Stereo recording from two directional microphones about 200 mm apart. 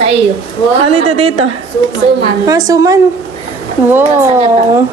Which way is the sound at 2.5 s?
20° right (ahead or behind).